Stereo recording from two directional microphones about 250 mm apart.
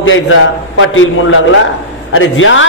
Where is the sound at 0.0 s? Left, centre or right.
Left.